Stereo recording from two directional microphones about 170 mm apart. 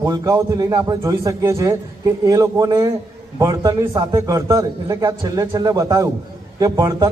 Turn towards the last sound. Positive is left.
turn(degrees=-20)  # may be behind; listen again after turning